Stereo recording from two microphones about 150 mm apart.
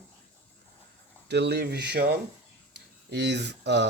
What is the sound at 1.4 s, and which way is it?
Speech, 90° right.